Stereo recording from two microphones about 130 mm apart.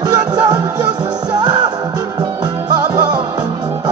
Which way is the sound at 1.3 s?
30° right (ahead or behind).